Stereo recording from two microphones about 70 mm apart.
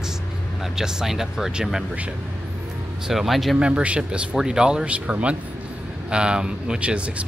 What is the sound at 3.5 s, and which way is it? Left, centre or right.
Speech, centre.